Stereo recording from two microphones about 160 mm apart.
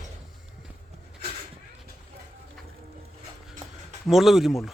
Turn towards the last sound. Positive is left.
turn(degrees=0)  # may be behind; listen again after turning